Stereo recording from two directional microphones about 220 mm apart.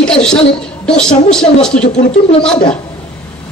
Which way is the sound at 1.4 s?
5° left (ahead or behind).